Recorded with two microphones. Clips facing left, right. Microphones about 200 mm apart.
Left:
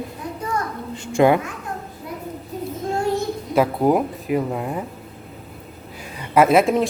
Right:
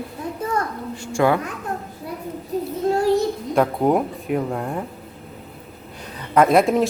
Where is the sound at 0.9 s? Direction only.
20° left (ahead or behind).